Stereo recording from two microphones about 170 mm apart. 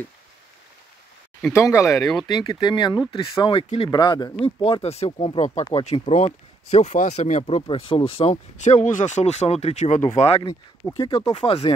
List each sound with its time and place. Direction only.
1.5 s speech: 15° left (ahead or behind); by 3.9 s 35° left (ahead or behind)
3.9 s speech: 25° left (ahead or behind)
6.0 s speech: 40° left (ahead or behind)